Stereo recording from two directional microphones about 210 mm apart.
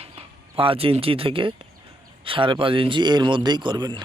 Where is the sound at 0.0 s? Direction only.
25° right (ahead or behind).